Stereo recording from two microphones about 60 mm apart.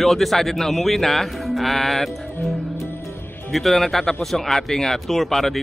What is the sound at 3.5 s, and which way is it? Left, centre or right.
Speech, centre.